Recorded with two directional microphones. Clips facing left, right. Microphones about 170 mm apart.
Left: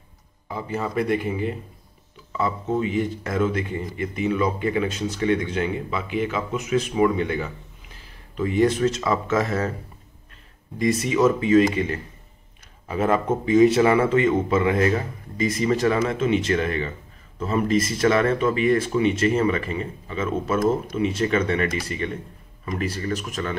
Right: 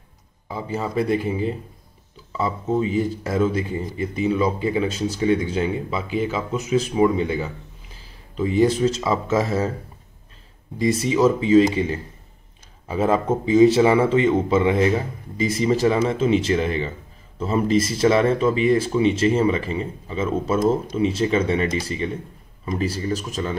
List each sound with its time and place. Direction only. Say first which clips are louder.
0.5 s speech: right 1 dB; 25° right (ahead or behind)
2.8 s speech: right 2 dB; 35° right (ahead or behind)
8.4 s speech: right 2 dB; 30° right (ahead or behind)
10.8 s speech: right 1 dB; 30° right (ahead or behind)
13.5 s speech: right 2 dB; 25° right (ahead or behind)
23.1 s speech: right 2 dB; 30° right (ahead or behind)